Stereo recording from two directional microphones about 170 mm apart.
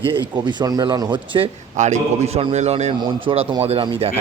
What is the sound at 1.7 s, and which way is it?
A man's voice, 45° right (ahead or behind).